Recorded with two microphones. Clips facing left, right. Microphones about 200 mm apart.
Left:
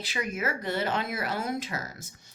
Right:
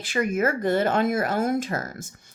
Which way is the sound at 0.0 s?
50° right (ahead or behind).